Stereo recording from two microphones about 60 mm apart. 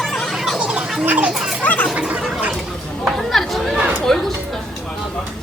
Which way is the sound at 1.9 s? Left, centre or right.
Centre.